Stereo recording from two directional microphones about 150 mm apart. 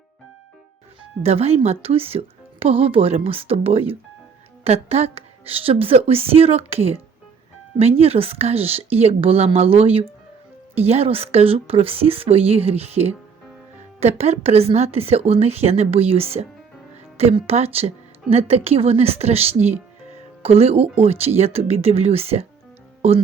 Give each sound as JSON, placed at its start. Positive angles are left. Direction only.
{"t": 1.2, "sound": "speech", "side_deg": -45}